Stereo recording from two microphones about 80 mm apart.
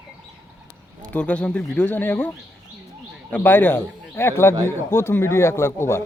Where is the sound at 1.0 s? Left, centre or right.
Centre.